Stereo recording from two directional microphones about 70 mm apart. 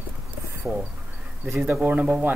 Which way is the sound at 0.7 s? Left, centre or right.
Right.